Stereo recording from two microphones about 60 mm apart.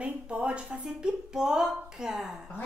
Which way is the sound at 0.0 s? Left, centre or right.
Centre.